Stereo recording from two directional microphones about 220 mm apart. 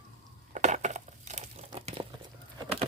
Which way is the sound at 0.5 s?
35° right (ahead or behind).